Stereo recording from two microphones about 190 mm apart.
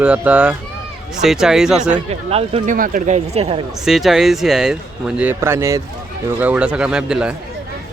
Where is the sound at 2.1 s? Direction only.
30° right (ahead or behind).